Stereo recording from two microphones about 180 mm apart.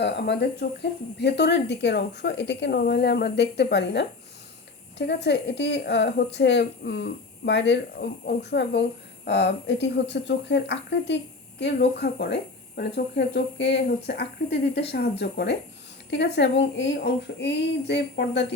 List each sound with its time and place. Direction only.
0.0 s speech: 70° left (ahead or behind)